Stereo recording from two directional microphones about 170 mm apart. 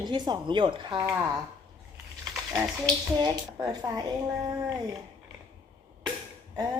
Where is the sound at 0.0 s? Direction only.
25° right (ahead or behind).